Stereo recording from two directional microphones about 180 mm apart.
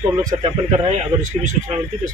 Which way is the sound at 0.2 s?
20° right (ahead or behind).